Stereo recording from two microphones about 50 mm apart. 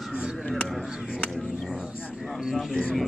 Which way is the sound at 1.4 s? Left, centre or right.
Centre.